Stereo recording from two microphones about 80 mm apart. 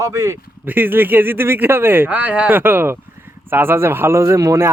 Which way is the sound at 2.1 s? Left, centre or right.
Centre.